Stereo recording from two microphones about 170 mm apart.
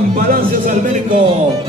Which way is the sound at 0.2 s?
55° right (ahead or behind).